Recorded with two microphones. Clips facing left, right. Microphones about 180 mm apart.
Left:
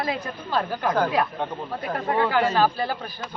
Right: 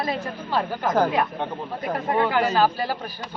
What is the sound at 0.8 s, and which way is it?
Speech, 20° right (ahead or behind).